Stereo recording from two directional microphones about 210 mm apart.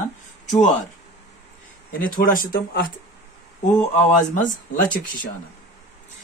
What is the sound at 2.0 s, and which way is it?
Speech, 40° left (ahead or behind).